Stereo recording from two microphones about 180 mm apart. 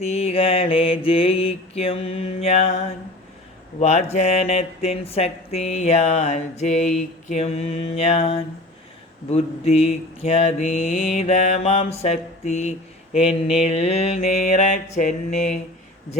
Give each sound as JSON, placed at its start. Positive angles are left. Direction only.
{"t": 0.0, "sound": "speech", "side_deg": 35}
{"t": 3.8, "sound": "speech", "side_deg": 40}
{"t": 10.8, "sound": "mantra", "side_deg": -5}
{"t": 11.1, "sound": "speech", "side_deg": 40}